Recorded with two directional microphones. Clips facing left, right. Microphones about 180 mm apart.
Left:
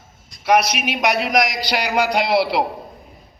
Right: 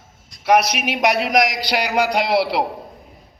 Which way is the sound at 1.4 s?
60° right (ahead or behind).